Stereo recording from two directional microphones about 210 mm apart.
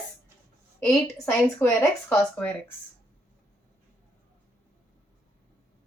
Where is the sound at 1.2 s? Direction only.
10° left (ahead or behind).